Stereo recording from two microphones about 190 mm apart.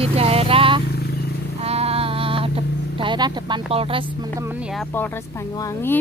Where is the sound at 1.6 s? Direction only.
30° right (ahead or behind).